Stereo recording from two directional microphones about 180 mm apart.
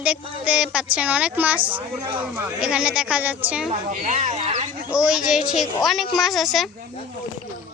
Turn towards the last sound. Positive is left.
turn(degrees=0)  # may be behind; listen again after turning